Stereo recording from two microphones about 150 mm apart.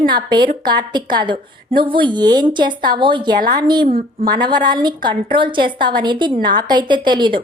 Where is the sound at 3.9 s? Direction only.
75° right (ahead or behind).